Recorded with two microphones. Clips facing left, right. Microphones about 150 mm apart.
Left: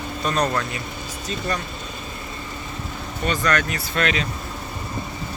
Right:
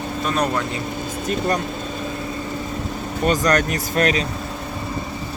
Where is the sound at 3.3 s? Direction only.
45° right (ahead or behind).